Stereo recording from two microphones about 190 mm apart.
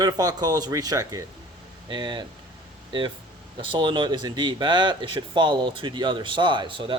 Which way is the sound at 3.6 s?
25° right (ahead or behind).